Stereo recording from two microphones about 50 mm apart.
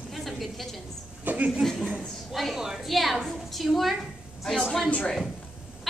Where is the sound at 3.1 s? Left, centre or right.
Centre.